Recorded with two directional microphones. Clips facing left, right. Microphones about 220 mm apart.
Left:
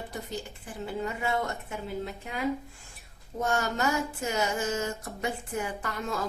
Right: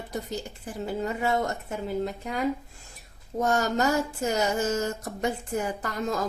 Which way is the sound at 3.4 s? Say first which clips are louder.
Right 4 dB; 40° right (ahead or behind).